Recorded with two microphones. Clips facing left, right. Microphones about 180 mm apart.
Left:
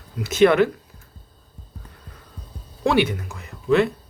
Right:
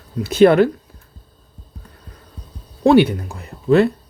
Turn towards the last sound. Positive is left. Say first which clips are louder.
# right 5 dB
turn(degrees=-35)  # may be behind; listen again after turning